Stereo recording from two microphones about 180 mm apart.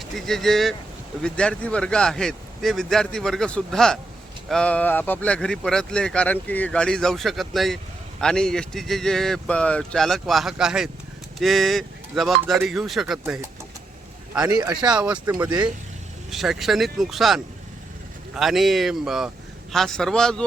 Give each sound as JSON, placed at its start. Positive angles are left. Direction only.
{"t": 0.0, "sound": "speech", "side_deg": 0}
{"t": 14.5, "sound": "speech", "side_deg": -25}
{"t": 14.9, "sound": "speech", "side_deg": -5}
{"t": 16.3, "sound": "speech", "side_deg": 0}